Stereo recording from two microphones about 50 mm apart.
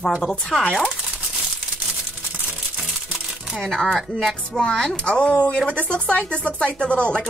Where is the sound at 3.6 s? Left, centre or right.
Centre.